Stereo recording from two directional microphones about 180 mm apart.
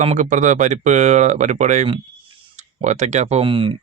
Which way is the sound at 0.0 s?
40° right (ahead or behind).